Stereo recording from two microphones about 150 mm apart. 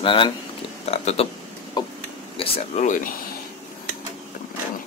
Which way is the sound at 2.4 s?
40° left (ahead or behind).